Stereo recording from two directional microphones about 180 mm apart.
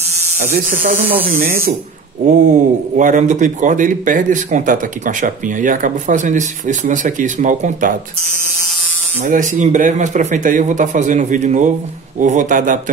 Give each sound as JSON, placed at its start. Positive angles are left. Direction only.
{"t": 0.4, "sound": "speech", "side_deg": -45}
{"t": 9.2, "sound": "speech", "side_deg": -45}